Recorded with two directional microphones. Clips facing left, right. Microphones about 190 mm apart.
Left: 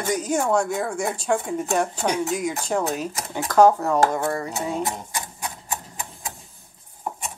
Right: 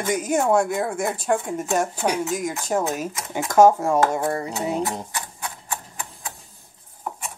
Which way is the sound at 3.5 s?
20° right (ahead or behind).